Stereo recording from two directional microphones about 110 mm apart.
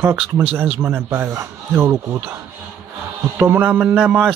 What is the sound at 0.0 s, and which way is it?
A man's voice, 15° right (ahead or behind).